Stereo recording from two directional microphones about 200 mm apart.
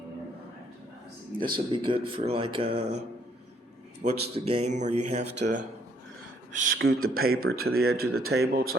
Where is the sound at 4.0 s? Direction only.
30° right (ahead or behind).